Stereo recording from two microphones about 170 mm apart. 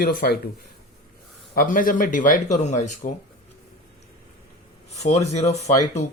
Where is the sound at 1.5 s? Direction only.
55° left (ahead or behind).